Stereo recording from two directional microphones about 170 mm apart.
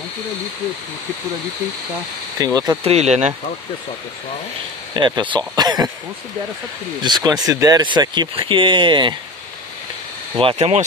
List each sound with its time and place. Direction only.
2.3 s speech: 20° right (ahead or behind)
2.8 s speech: 40° right (ahead or behind)
4.9 s speech: 25° right (ahead or behind)
7.0 s speech: 25° right (ahead or behind)
10.3 s speech: 35° right (ahead or behind)